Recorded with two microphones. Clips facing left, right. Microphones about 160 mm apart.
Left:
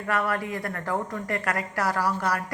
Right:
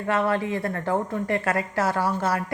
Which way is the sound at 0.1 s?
25° right (ahead or behind).